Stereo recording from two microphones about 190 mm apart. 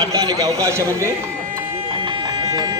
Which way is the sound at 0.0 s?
20° right (ahead or behind).